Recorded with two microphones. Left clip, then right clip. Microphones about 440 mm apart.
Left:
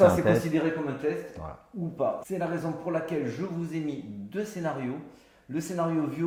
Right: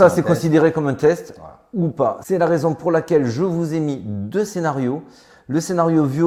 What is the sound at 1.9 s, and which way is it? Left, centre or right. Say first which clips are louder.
Speech: right 9 dB; right.